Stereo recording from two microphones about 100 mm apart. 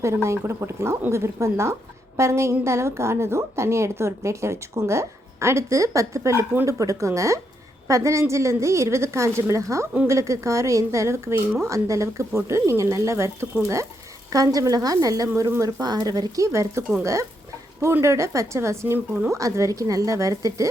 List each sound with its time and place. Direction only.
0.0 s a woman's voice: 30° right (ahead or behind)
15.8 s a woman's voice: 40° right (ahead or behind)